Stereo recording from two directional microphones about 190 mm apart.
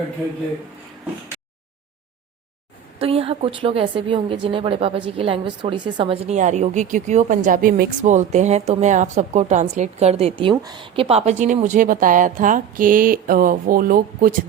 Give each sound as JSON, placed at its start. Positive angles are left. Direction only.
{"t": 3.0, "sound": "a woman's voice", "side_deg": -30}